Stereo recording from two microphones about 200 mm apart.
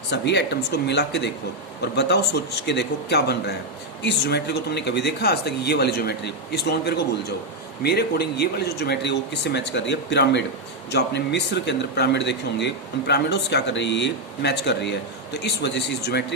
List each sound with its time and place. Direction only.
0.1 s speech: 60° left (ahead or behind)